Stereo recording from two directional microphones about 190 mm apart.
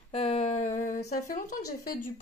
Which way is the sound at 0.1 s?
30° left (ahead or behind).